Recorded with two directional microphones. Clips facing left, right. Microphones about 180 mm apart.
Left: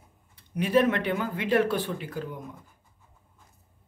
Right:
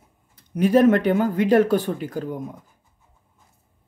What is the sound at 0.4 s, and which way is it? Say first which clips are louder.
Speech: right 6 dB; 40° right (ahead or behind).